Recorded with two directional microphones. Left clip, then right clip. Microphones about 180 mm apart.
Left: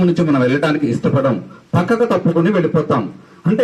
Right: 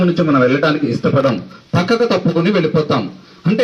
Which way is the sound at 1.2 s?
10° left (ahead or behind).